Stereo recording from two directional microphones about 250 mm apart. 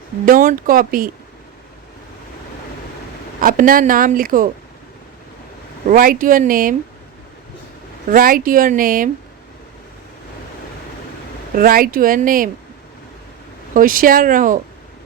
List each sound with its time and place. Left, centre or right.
0.3 s speech: right
3.4 s speech: right
5.9 s speech: right
8.1 s speech: right
11.5 s speech: right
13.7 s speech: right